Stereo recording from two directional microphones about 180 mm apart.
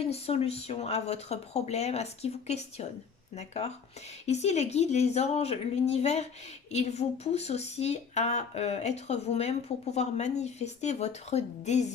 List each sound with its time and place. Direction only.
0.0 s speech: 35° left (ahead or behind)